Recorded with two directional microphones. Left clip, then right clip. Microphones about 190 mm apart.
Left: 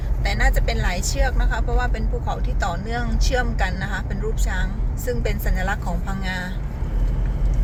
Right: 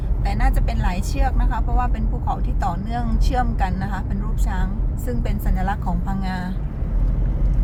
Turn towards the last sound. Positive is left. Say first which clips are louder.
# even
turn(degrees=0)  # may be behind; listen again after turning